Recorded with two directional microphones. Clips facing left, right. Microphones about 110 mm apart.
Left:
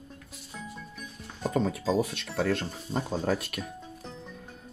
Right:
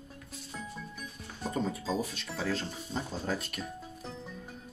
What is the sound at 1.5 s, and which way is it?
Speech, 85° left.